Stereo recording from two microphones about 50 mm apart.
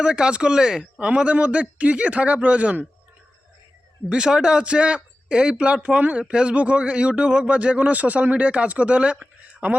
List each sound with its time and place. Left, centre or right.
0.0 s a man's voice: centre
4.1 s a man's voice: centre